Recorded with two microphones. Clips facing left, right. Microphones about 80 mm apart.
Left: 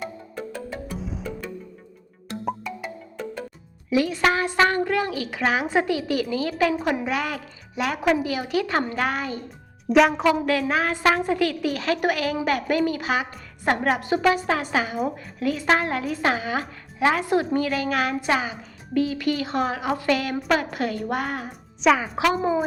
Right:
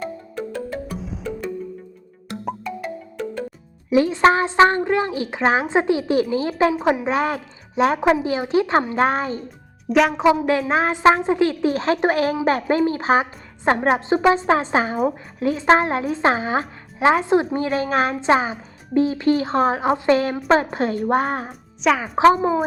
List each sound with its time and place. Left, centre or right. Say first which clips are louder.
0.0 s music: right 4 dB; centre
2.4 s music: right 2 dB; centre
3.8 s a woman's voice: right 6 dB; right
9.9 s a woman's voice: even; centre
10.4 s a woman's voice: right 3 dB; right
21.8 s a woman's voice: even; centre